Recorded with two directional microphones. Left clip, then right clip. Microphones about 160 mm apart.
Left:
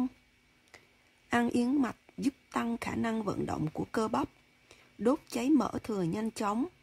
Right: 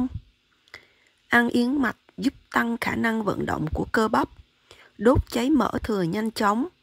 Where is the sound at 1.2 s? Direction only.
20° right (ahead or behind).